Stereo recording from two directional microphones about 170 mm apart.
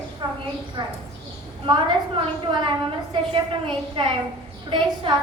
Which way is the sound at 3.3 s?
30° right (ahead or behind).